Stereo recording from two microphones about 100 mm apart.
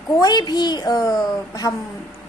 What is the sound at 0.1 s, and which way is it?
A woman's voice, 40° left (ahead or behind).